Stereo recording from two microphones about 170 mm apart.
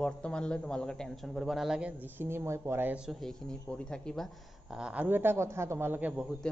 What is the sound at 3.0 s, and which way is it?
Speech, centre (ahead or behind).